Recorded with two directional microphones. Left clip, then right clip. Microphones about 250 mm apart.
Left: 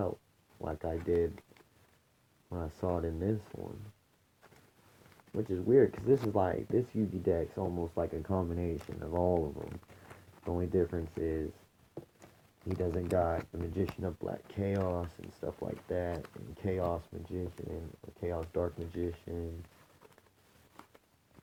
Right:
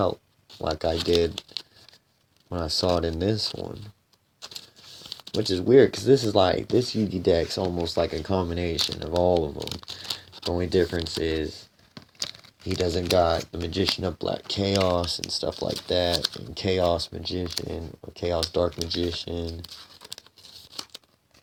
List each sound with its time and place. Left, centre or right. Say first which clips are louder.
0.6 s speech: right 12 dB; right
5.3 s speech: right 9 dB; right
12.6 s speech: right 10 dB; right